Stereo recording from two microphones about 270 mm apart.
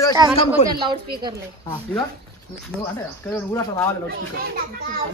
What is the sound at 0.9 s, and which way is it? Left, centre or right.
Speech, centre.